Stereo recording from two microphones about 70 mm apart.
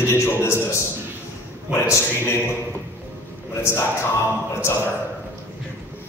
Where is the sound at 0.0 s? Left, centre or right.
Left.